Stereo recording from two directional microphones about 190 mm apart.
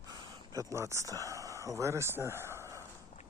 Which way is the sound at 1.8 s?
15° right (ahead or behind).